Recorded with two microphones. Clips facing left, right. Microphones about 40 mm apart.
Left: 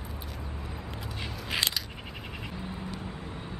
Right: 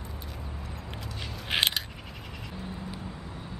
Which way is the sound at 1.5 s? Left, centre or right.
Right.